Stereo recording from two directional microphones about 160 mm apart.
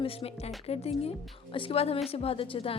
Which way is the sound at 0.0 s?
35° left (ahead or behind).